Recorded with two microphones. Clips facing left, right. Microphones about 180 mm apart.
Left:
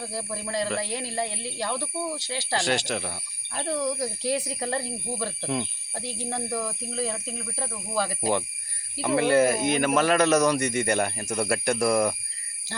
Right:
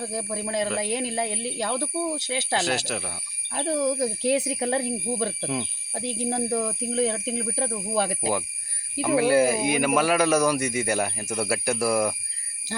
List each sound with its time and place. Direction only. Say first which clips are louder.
0.1 s speech: right 3 dB; 15° right (ahead or behind)
2.6 s speech: left 3 dB; 5° right (ahead or behind)
3.5 s speech: right 4 dB; 20° right (ahead or behind)
9.0 s speech: right 1 dB; 5° right (ahead or behind)